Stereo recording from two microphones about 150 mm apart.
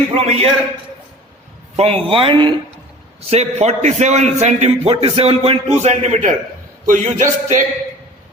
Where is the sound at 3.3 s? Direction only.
45° right (ahead or behind).